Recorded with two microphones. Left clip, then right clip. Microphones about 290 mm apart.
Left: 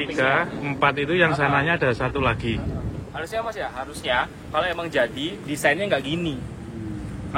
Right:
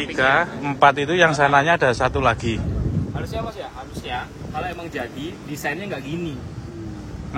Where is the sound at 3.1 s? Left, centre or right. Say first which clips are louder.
Left 6 dB; left.